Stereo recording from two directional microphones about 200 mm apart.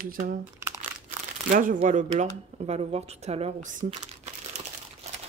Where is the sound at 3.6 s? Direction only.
35° right (ahead or behind).